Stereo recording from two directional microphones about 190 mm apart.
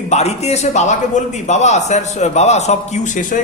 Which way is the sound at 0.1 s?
35° left (ahead or behind).